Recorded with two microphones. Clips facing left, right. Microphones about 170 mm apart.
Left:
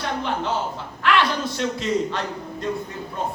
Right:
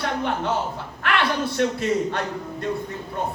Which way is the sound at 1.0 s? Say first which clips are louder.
Left 2 dB; 55° right (ahead or behind).